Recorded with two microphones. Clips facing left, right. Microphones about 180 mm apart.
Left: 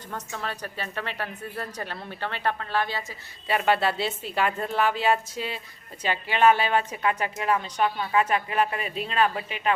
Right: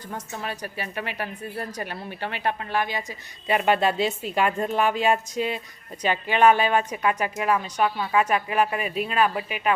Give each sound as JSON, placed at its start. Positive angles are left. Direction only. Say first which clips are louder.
{"t": 0.1, "sound": "a woman's voice", "louder": "right 1 dB", "side_deg": -10}